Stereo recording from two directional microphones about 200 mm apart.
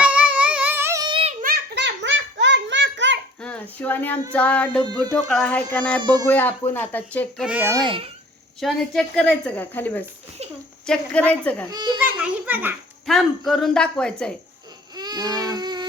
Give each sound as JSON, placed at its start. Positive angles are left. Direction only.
{"t": 0.0, "sound": "child singing", "side_deg": -5}
{"t": 1.4, "sound": "baby laughter", "side_deg": -50}
{"t": 3.4, "sound": "a sound", "side_deg": 5}
{"t": 6.0, "sound": "speech", "side_deg": -20}
{"t": 6.2, "sound": "a sound", "side_deg": 10}
{"t": 7.4, "sound": "a child's voice", "side_deg": -10}
{"t": 8.6, "sound": "a child's voice", "side_deg": 0}
{"t": 10.8, "sound": "a sound", "side_deg": 5}
{"t": 11.9, "sound": "a child's voice", "side_deg": -5}
{"t": 14.9, "sound": "baby cry", "side_deg": -20}